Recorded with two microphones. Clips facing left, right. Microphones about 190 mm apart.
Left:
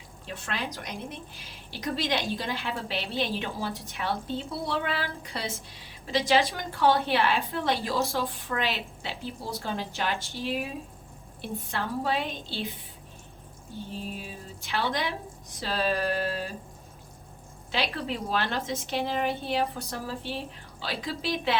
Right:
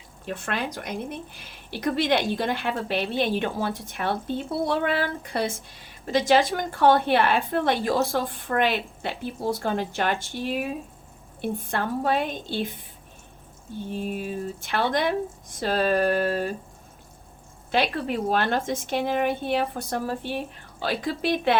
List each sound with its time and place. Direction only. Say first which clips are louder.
0.3 s a woman's voice: right 5 dB; 55° right (ahead or behind)
13.9 s a woman's voice: right 10 dB; 55° right (ahead or behind)
17.7 s a woman's voice: right 6 dB; 50° right (ahead or behind)